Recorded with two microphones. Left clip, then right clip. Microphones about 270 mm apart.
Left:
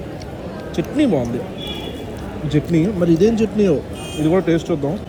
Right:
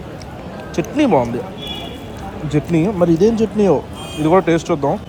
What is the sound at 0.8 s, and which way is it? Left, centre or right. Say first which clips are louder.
Speech: right 2 dB; centre.